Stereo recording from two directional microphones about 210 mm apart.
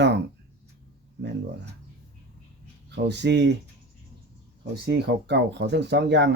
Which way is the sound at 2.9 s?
55° right (ahead or behind).